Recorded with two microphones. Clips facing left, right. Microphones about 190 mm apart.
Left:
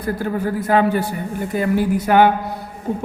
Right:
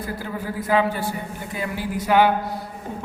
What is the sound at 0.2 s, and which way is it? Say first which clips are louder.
Mantra: left 7 dB; 50° left (ahead or behind).